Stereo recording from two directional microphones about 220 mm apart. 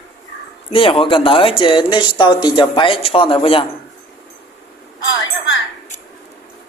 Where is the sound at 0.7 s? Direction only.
25° left (ahead or behind).